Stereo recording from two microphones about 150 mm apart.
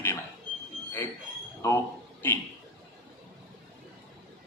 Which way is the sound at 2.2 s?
15° left (ahead or behind).